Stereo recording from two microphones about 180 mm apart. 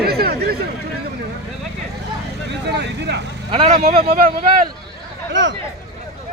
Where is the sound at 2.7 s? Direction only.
70° right (ahead or behind).